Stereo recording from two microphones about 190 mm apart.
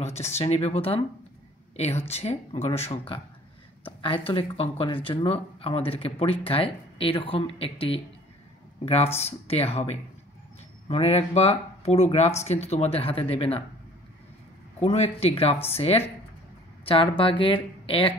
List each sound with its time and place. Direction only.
0.0 s speech: 35° left (ahead or behind)
14.8 s speech: 30° left (ahead or behind)